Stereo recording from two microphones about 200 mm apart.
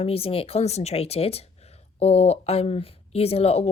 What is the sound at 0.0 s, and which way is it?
Speech, 30° left (ahead or behind).